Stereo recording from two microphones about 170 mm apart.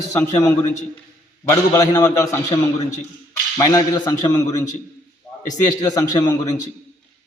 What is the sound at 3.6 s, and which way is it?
Speech, 20° left (ahead or behind).